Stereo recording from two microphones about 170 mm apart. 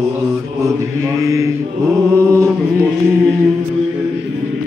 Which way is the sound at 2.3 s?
15° right (ahead or behind).